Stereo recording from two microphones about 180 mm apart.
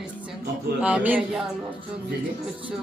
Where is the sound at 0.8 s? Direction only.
10° right (ahead or behind).